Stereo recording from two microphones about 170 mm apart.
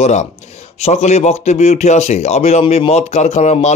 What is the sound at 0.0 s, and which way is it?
Speech, 40° left (ahead or behind).